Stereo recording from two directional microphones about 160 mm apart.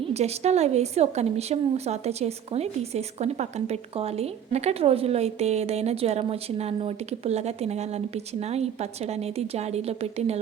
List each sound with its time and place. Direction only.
0.1 s a woman's voice: 45° right (ahead or behind)